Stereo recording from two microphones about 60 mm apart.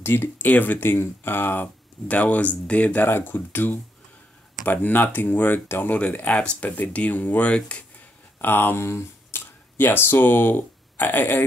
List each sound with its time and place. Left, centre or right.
0.0 s speech: left
5.9 s speech: left
8.4 s speech: left